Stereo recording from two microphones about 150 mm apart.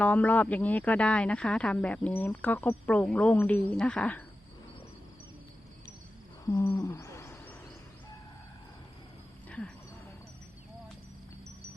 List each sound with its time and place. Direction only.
0.0 s speech: 10° left (ahead or behind)
6.4 s owl: 20° left (ahead or behind)
9.5 s a sound: 10° left (ahead or behind)